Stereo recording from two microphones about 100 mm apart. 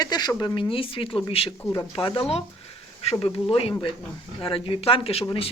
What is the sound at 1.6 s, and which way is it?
Speech, 30° left (ahead or behind).